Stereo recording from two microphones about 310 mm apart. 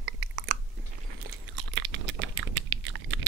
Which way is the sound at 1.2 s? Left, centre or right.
Right.